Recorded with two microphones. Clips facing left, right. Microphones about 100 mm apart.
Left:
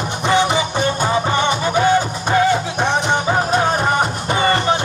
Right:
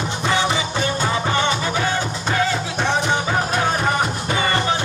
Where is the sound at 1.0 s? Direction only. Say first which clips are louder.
Left 2 dB; 20° left (ahead or behind).